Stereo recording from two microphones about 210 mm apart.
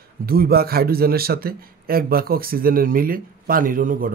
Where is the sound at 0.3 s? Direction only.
45° right (ahead or behind).